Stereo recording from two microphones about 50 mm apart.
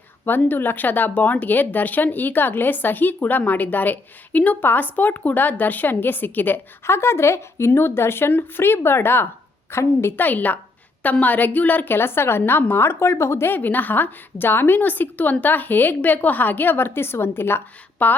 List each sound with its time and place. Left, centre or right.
0.3 s speech: left
6.8 s a woman's voice: left
10.2 s a woman's voice: left
13.5 s speech: left
18.0 s speech: left